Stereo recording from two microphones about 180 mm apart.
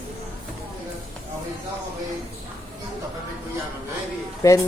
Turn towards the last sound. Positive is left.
turn(degrees=20)  # may be behind; listen again after turning